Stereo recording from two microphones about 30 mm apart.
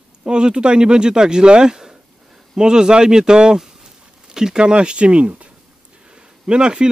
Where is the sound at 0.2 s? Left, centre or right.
Right.